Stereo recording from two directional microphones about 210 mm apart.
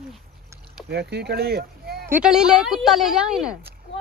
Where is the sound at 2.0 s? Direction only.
5° right (ahead or behind).